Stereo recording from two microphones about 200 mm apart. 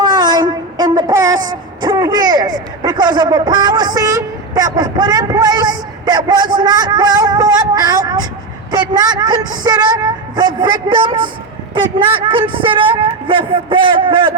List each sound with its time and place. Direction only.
0.0 s a man's voice: 20° right (ahead or behind)